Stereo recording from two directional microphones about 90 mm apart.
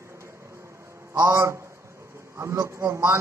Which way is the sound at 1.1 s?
40° right (ahead or behind).